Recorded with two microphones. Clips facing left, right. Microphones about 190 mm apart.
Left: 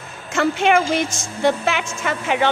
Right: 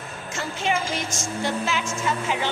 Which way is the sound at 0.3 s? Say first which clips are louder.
Left 10 dB; 65° left (ahead or behind).